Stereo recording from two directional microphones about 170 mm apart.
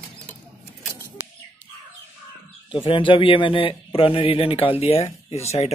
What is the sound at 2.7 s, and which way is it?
A man's voice, 30° left (ahead or behind).